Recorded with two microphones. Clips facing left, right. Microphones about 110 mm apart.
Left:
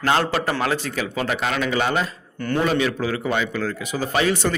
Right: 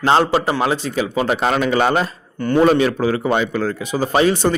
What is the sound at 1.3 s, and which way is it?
Speech, 40° right (ahead or behind).